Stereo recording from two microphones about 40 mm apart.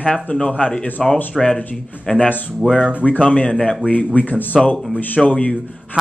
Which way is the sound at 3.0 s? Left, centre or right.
Left.